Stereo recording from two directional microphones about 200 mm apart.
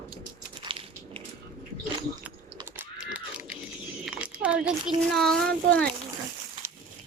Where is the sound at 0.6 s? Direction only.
25° right (ahead or behind).